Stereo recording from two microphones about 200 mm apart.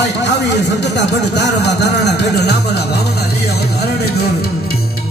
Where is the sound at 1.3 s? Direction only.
55° left (ahead or behind).